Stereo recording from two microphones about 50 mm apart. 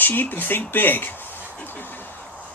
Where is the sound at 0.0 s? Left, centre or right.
Left.